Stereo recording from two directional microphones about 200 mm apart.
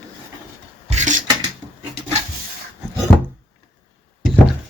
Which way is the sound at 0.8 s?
35° right (ahead or behind).